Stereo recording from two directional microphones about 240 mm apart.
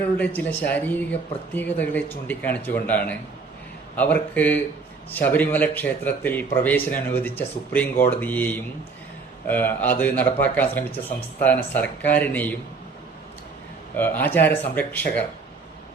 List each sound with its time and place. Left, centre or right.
0.2 s a man's voice: centre
13.9 s a man's voice: centre